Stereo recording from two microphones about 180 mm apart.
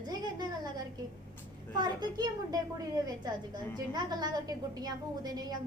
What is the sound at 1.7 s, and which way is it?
A woman's voice, 25° right (ahead or behind).